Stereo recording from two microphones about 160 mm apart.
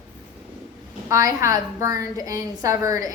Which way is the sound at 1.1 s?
20° right (ahead or behind).